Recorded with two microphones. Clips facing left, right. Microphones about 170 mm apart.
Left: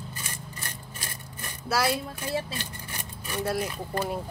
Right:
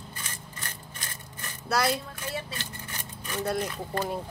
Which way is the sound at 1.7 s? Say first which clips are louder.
Even; centre (ahead or behind).